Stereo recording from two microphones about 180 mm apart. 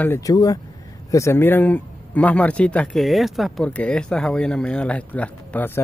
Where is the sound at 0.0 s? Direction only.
15° left (ahead or behind).